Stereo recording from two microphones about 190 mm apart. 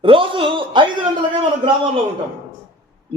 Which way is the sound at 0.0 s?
25° right (ahead or behind).